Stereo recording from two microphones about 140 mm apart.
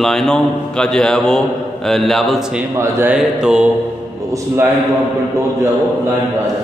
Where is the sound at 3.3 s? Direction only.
5° right (ahead or behind).